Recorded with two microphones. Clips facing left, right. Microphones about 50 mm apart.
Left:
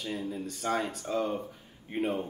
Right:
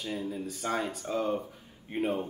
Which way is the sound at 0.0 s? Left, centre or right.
Centre.